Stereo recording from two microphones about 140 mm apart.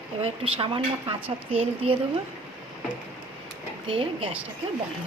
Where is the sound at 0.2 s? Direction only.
40° right (ahead or behind).